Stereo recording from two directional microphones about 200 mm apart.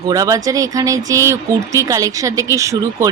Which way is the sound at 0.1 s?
15° right (ahead or behind).